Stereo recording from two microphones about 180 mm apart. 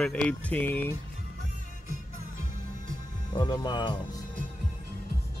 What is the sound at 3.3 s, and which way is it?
Speech, 25° left (ahead or behind).